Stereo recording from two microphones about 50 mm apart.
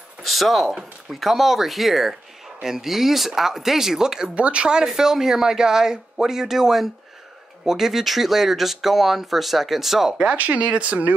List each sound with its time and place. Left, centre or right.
0.2 s speech: centre
4.4 s speech: right; by 10.1 s centre
10.3 s speech: right